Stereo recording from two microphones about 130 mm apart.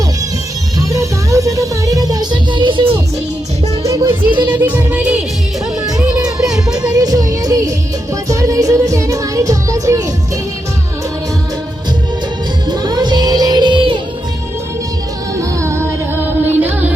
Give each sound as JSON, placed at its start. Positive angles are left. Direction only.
{"t": 0.9, "sound": "music", "side_deg": -25}
{"t": 3.8, "sound": "music", "side_deg": -20}
{"t": 6.5, "sound": "music", "side_deg": -5}
{"t": 6.9, "sound": "music", "side_deg": -30}
{"t": 12.6, "sound": "music", "side_deg": -35}
{"t": 15.4, "sound": "music", "side_deg": -20}